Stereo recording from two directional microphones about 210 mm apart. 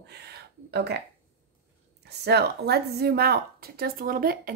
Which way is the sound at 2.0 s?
50° right (ahead or behind).